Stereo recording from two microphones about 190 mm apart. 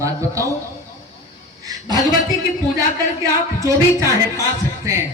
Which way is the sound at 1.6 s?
20° right (ahead or behind).